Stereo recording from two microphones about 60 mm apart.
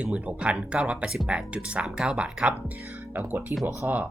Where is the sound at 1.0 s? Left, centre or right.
Centre.